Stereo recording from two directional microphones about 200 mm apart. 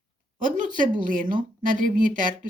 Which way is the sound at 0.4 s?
40° right (ahead or behind).